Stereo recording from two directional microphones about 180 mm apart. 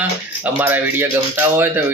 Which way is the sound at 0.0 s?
10° right (ahead or behind).